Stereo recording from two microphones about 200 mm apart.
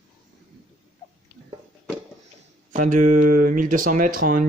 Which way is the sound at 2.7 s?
40° right (ahead or behind).